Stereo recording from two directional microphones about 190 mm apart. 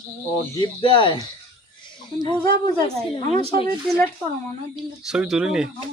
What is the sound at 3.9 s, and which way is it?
Speech, centre (ahead or behind).